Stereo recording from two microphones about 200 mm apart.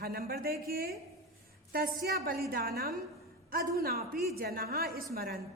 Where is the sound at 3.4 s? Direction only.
50° right (ahead or behind).